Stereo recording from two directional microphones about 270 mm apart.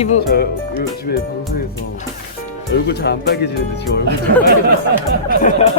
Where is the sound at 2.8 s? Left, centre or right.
Left.